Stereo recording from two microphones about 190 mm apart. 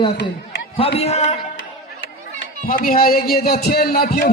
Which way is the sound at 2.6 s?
50° left (ahead or behind).